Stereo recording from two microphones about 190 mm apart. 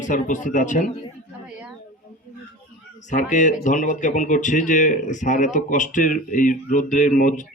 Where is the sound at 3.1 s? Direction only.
40° left (ahead or behind).